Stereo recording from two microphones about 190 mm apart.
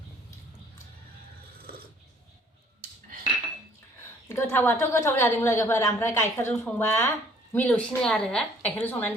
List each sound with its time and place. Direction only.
4.3 s a woman's voice: 10° left (ahead or behind)